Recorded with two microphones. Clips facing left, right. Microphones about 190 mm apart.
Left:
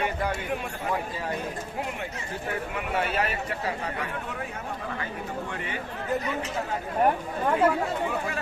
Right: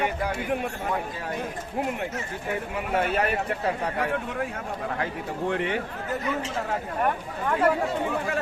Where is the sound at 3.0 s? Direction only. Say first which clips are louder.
Right 4 dB; 50° right (ahead or behind).